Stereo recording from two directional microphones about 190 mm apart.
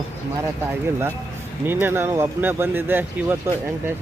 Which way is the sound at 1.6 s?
10° right (ahead or behind).